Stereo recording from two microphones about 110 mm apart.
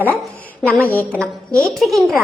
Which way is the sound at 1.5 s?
Centre (ahead or behind).